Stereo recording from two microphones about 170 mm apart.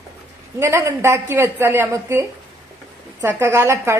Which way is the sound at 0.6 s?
15° right (ahead or behind).